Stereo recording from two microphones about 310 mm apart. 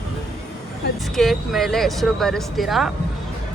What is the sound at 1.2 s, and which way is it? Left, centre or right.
Speech, centre.